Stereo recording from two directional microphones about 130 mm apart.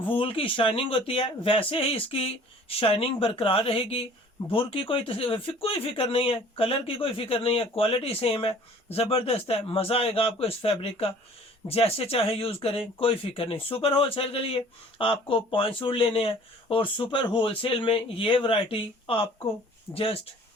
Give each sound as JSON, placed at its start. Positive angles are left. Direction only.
{"t": 0.1, "sound": "speech", "side_deg": 45}